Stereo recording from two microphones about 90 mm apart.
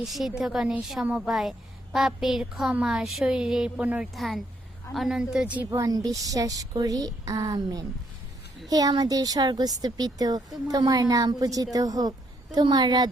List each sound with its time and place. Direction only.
0.0 s a woman's voice: 5° right (ahead or behind)
4.1 s a woman's voice: centre (ahead or behind)
5.7 s a woman's voice: 40° right (ahead or behind)